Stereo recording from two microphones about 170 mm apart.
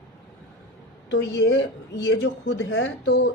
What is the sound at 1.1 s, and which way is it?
A woman's voice, 90° left.